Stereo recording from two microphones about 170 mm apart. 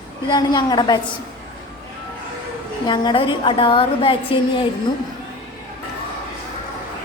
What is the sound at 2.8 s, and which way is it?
A woman's voice, 25° left (ahead or behind).